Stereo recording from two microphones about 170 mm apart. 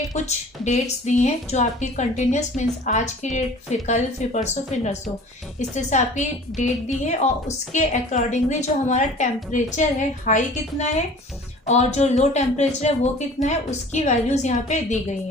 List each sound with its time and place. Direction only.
0.1 s a woman's voice: 45° left (ahead or behind)